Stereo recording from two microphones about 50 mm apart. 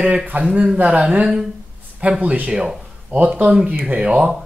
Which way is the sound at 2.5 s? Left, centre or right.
Centre.